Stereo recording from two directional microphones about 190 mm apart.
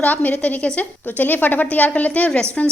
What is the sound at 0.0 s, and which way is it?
A woman's voice, 10° left (ahead or behind).